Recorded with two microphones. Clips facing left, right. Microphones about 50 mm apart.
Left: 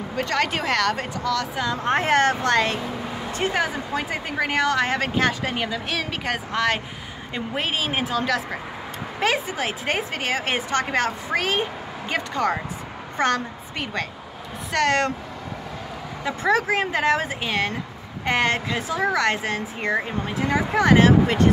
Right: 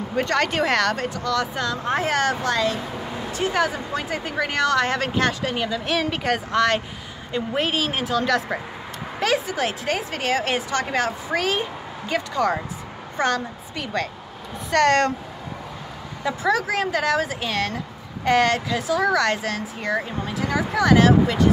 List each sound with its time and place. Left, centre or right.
0.1 s speech: centre
1.9 s speech: left
3.5 s speech: centre
5.9 s a woman's voice: centre; by 13.8 s left
14.7 s speech: centre
16.4 s speech: left